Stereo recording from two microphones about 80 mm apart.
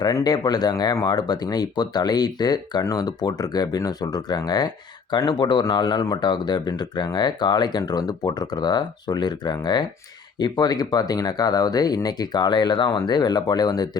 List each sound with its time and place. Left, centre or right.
0.3 s speech: left
5.1 s speech: left